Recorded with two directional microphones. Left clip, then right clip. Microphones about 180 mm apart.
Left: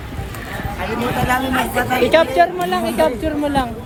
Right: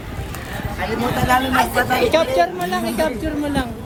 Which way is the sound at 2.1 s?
60° left (ahead or behind).